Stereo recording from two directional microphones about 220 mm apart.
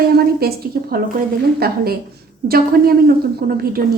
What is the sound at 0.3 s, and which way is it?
A woman's voice, 45° right (ahead or behind).